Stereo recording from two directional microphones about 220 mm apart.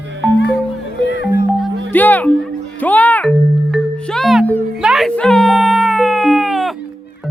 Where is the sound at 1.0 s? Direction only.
50° left (ahead or behind).